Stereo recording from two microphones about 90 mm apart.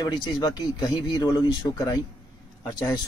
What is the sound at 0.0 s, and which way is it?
A man's voice, 50° left (ahead or behind).